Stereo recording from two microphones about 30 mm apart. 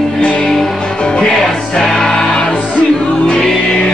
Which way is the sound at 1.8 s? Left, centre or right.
Centre.